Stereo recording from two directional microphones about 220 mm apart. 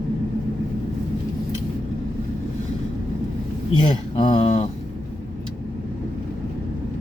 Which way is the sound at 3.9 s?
20° left (ahead or behind).